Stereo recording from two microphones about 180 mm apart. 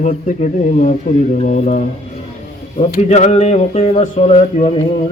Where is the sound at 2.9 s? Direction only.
40° left (ahead or behind).